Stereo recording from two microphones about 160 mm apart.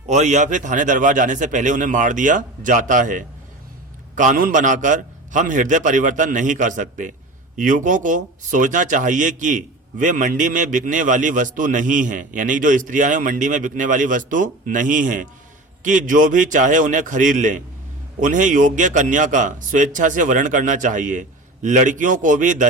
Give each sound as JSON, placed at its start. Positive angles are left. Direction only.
{"t": 0.1, "sound": "speech", "side_deg": -45}